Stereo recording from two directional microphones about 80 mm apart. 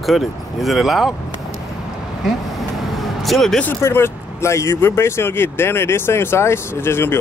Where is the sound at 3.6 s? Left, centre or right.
Left.